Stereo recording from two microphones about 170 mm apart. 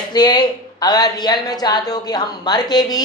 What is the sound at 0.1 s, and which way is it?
A man's voice, 25° left (ahead or behind).